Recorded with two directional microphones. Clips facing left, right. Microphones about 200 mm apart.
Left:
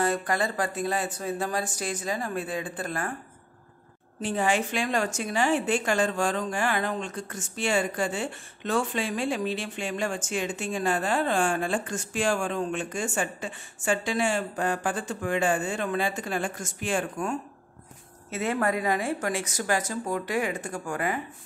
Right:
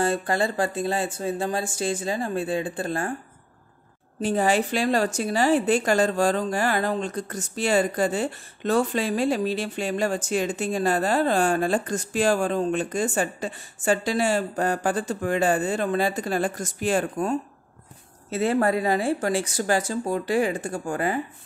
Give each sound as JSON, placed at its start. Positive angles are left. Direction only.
{"t": 0.0, "sound": "speech", "side_deg": -30}
{"t": 4.2, "sound": "a woman's voice", "side_deg": -40}